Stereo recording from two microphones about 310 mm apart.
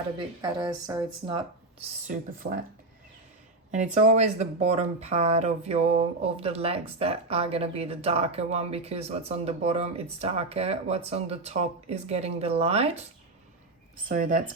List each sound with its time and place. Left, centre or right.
0.4 s speech: centre
1.8 s speech: right
3.7 s speech: right
14.1 s speech: right